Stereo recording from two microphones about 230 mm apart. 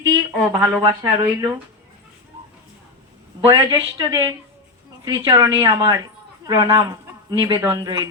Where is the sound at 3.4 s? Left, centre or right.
Centre.